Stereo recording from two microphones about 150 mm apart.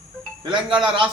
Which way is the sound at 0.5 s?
30° right (ahead or behind).